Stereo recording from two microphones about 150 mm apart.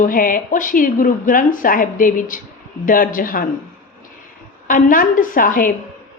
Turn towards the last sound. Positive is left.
turn(degrees=65)  # may be behind; listen again after turning